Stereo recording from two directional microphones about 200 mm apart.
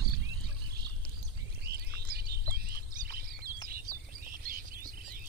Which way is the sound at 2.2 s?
50° right (ahead or behind).